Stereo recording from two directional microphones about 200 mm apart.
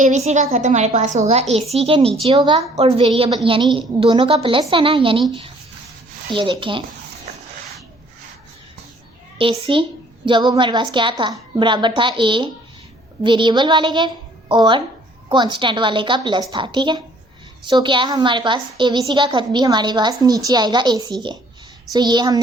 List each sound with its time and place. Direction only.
0.0 s a woman's voice: 35° right (ahead or behind)
6.3 s a woman's voice: 25° right (ahead or behind)
9.4 s a woman's voice: 25° right (ahead or behind)